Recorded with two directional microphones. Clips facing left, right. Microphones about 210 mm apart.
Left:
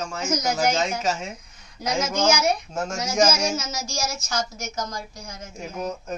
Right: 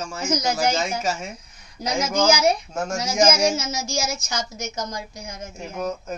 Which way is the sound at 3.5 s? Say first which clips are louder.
Right 3 dB; 25° right (ahead or behind).